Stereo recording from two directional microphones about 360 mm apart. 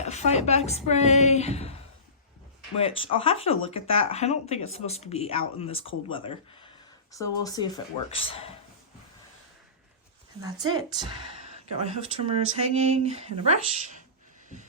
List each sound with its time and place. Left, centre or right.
0.0 s speech: centre
3.0 s speech: centre
10.4 s a woman's voice: centre